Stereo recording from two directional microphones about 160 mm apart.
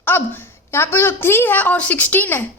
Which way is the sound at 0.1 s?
15° left (ahead or behind).